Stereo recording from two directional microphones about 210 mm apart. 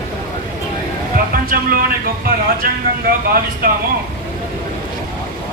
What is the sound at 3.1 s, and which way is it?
Speech, 40° right (ahead or behind).